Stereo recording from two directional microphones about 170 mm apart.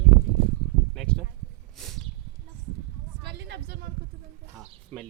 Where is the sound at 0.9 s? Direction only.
5° left (ahead or behind).